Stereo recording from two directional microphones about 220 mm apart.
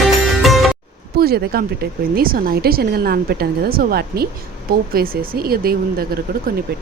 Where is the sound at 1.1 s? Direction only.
45° right (ahead or behind).